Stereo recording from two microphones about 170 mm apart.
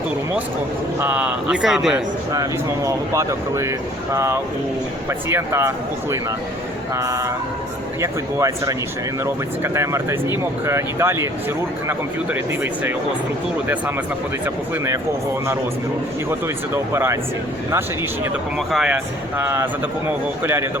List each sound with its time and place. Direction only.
0.9 s speech: 10° right (ahead or behind)
1.9 s speech: 20° right (ahead or behind)
9.7 s speech: 15° right (ahead or behind)
16.7 s speech: 15° right (ahead or behind)
18.7 s speech: 5° right (ahead or behind)
19.4 s speech: 15° right (ahead or behind)